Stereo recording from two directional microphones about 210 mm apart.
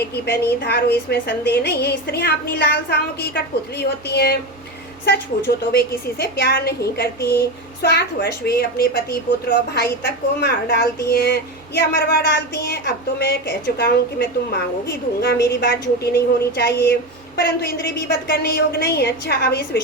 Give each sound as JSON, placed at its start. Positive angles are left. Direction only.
{"t": 0.0, "sound": "speech", "side_deg": 50}
{"t": 5.7, "sound": "speech", "side_deg": 50}
{"t": 10.4, "sound": "speech", "side_deg": 50}